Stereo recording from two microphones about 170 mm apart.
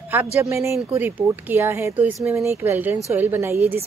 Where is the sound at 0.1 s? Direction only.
15° right (ahead or behind).